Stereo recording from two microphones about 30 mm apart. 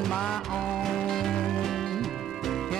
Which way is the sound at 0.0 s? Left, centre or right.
Centre.